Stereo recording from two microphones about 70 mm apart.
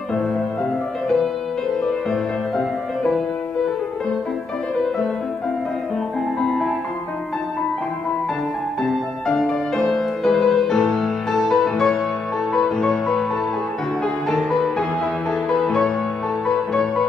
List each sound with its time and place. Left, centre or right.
2.0 s music: centre
6.4 s music: centre
8.8 s music: centre
14.3 s music: centre